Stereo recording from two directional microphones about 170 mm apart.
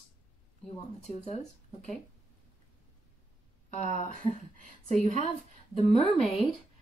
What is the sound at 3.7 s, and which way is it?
Speech, 45° left (ahead or behind).